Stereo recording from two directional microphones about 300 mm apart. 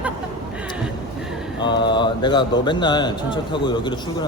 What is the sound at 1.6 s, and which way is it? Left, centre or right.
A man's voice, centre.